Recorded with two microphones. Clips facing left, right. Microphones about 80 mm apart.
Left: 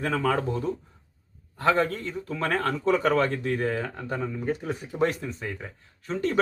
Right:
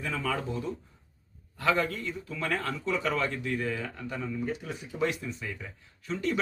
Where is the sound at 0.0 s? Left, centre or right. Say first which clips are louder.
Left 7 dB; left.